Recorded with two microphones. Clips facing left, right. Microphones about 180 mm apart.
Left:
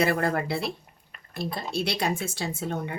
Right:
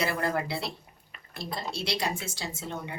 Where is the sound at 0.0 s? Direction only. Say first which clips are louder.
Left 4 dB; 55° left (ahead or behind).